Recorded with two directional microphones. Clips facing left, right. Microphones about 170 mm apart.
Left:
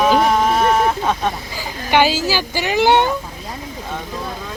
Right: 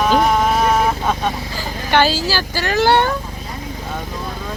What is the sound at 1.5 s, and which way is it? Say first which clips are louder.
Speech: left 1 dB; 15° left (ahead or behind).